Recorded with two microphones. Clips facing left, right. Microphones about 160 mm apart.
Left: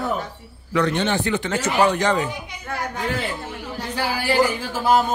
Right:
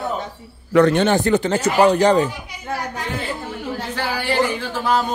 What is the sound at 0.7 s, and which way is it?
Speech, 50° right (ahead or behind).